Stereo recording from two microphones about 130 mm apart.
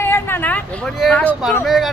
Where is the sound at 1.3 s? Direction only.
5° right (ahead or behind).